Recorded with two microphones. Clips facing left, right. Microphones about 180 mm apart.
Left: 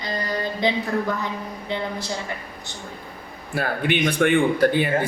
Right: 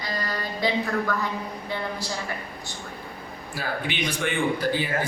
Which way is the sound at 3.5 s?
60° left (ahead or behind).